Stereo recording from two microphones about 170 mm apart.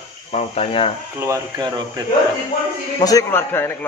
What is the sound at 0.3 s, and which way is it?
Speech, 40° left (ahead or behind).